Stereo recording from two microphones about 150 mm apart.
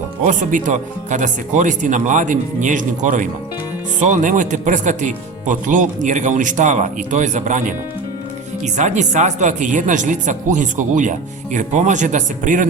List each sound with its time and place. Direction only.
0.3 s speech: 60° right (ahead or behind)